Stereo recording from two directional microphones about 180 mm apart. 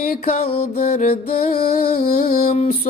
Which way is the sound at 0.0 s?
50° left (ahead or behind).